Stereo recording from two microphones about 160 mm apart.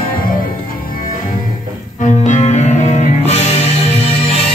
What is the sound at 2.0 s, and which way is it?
Music, 50° left (ahead or behind).